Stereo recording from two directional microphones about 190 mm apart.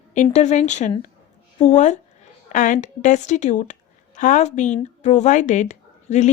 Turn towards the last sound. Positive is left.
turn(degrees=40)  # may be behind; listen again after turning